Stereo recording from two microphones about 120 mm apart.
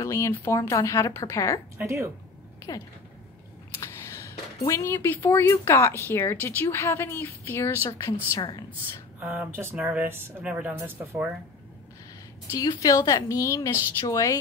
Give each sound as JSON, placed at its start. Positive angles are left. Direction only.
{"t": 0.0, "sound": "a woman's voice", "side_deg": 25}
{"t": 1.8, "sound": "speech", "side_deg": -25}
{"t": 3.8, "sound": "a woman's voice", "side_deg": 25}
{"t": 9.2, "sound": "speech", "side_deg": -15}
{"t": 12.4, "sound": "a woman's voice", "side_deg": 30}